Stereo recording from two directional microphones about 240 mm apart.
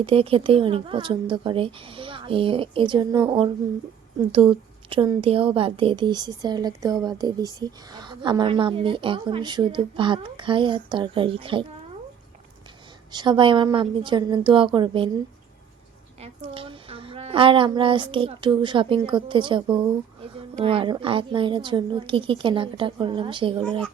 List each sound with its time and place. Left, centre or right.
0.0 s a woman's voice: right
13.1 s a woman's voice: centre
16.2 s a woman's voice: right